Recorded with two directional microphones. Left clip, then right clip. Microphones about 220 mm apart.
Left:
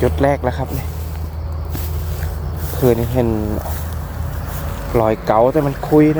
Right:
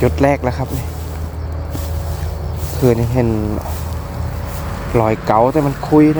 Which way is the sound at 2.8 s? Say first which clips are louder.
Even; centre (ahead or behind).